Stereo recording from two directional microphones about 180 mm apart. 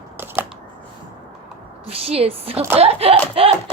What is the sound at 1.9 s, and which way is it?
A child's voice, 35° right (ahead or behind).